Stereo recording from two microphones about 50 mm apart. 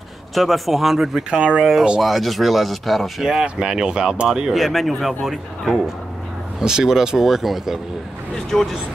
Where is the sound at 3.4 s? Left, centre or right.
Centre.